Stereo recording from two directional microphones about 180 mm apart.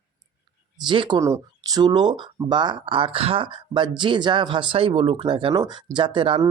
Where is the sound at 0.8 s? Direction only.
25° right (ahead or behind).